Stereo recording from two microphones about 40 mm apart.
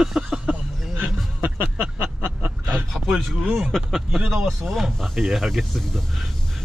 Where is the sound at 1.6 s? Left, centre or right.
Right.